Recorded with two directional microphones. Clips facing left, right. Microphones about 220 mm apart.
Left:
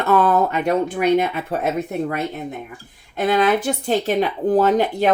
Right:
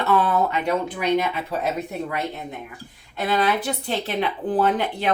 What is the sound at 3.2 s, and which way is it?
Speech, 45° left (ahead or behind).